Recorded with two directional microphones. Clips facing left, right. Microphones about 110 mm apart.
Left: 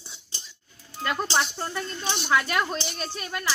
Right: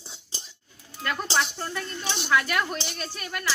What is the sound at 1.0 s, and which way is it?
Speech, 20° left (ahead or behind).